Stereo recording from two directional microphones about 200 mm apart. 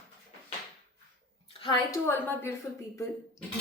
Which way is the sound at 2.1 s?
10° left (ahead or behind).